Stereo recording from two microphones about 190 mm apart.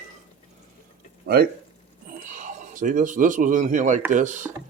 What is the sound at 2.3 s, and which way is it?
Speech, 40° right (ahead or behind).